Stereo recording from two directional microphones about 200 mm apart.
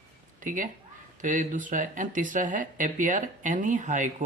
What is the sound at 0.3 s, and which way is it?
A woman's voice, 40° right (ahead or behind).